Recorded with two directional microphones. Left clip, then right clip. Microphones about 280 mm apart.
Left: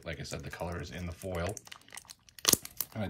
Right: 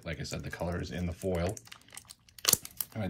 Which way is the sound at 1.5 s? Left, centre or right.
Left.